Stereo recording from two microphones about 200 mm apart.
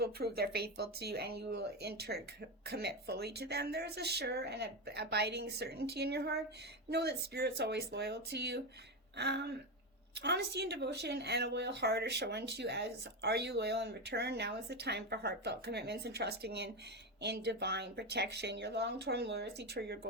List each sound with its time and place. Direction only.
0.0 s speech: 50° right (ahead or behind)